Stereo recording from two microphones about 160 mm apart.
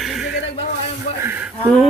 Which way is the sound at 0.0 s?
Centre (ahead or behind).